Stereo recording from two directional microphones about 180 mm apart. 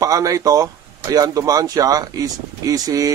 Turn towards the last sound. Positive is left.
turn(degrees=-20)  # may be behind; listen again after turning